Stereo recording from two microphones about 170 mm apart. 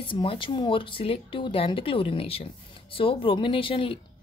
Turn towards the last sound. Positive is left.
turn(degrees=30)  # may be behind; listen again after turning